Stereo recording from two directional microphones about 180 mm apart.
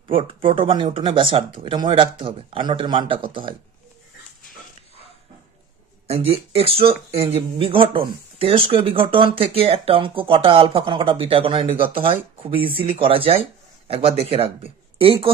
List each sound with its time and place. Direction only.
0.1 s speech: 30° right (ahead or behind)
6.0 s speech: 35° right (ahead or behind)